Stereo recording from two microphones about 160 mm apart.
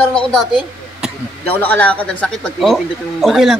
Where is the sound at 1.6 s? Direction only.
10° left (ahead or behind).